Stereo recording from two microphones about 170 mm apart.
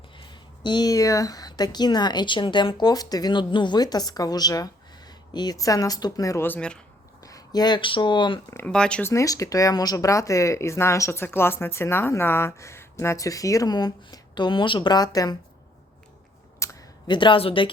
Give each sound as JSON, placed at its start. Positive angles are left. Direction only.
{"t": 0.2, "sound": "speech", "side_deg": 25}
{"t": 7.2, "sound": "speech", "side_deg": 20}
{"t": 8.5, "sound": "speech", "side_deg": 5}
{"t": 16.6, "sound": "a sound", "side_deg": 25}